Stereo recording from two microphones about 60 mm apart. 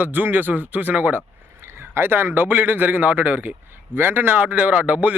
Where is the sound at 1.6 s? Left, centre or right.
Right.